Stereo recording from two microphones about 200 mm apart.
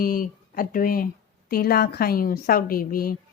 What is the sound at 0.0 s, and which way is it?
Speech, 45° left (ahead or behind).